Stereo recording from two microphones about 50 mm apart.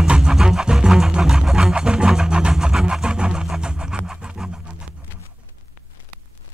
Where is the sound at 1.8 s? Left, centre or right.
Centre.